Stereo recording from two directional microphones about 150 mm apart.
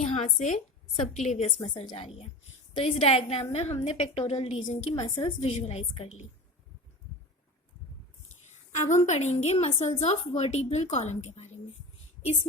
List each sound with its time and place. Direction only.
0.0 s a woman's voice: 50° left (ahead or behind)
5.4 s a woman's voice: 50° left (ahead or behind)
9.0 s a woman's voice: 50° left (ahead or behind)